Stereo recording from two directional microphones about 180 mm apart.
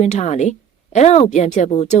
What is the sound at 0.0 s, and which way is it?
Speech, 40° left (ahead or behind).